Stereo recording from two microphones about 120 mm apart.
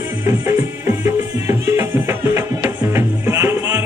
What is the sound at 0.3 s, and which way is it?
Music, 20° right (ahead or behind).